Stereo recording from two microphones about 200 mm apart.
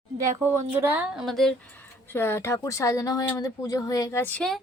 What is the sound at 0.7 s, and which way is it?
Speech, 10° right (ahead or behind).